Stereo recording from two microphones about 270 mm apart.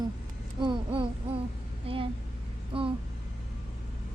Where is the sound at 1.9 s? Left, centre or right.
Centre.